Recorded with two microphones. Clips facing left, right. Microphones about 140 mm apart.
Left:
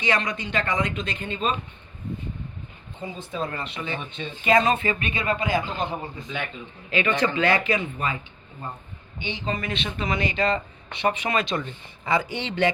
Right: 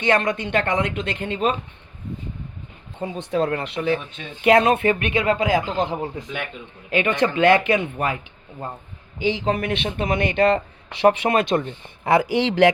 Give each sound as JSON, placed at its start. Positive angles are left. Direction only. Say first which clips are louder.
{"t": 0.0, "sound": "speech", "louder": "right 6 dB", "side_deg": -55}
{"t": 3.0, "sound": "speech", "louder": "right 8 dB", "side_deg": -70}
{"t": 4.4, "sound": "speech", "louder": "right 5 dB", "side_deg": -65}
{"t": 7.3, "sound": "speech", "louder": "right 6 dB", "side_deg": -55}
{"t": 9.1, "sound": "speech", "louder": "right 8 dB", "side_deg": -90}
{"t": 10.9, "sound": "speech", "louder": "right 7 dB", "side_deg": -80}
{"t": 12.0, "sound": "speech", "louder": "right 7 dB", "side_deg": -70}